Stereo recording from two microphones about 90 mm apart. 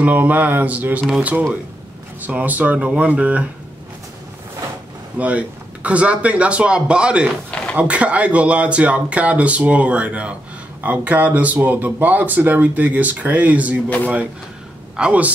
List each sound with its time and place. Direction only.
0.0 s speech: 20° right (ahead or behind)
5.2 s speech: 15° right (ahead or behind)
13.8 s speech: 15° left (ahead or behind)
15.0 s speech: 15° right (ahead or behind)